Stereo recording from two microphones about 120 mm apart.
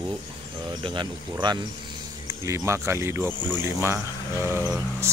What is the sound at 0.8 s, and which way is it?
Speech, 45° right (ahead or behind).